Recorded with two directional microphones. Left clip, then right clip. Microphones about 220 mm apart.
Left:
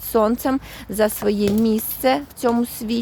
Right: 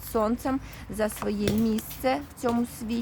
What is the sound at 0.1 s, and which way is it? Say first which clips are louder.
Speech: left 8 dB; 30° left (ahead or behind).